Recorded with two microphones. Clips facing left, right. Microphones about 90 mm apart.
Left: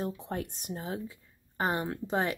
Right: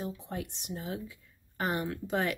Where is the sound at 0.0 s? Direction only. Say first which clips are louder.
Left 3 dB; 50° left (ahead or behind).